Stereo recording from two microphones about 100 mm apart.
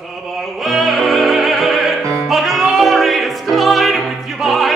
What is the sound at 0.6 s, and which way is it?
Music, centre (ahead or behind).